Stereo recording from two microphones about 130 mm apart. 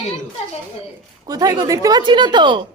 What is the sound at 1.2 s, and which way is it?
A woman's voice, 30° right (ahead or behind).